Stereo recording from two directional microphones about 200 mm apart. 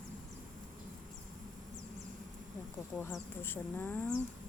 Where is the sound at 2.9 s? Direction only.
Centre (ahead or behind).